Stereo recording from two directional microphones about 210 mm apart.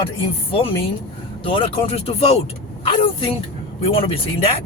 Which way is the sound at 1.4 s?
25° left (ahead or behind).